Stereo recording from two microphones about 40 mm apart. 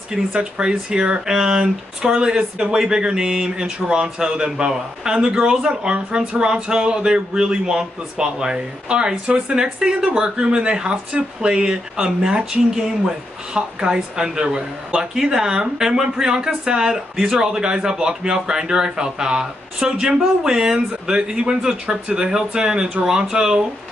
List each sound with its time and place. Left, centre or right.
0.1 s speech: right
1.3 s speech: centre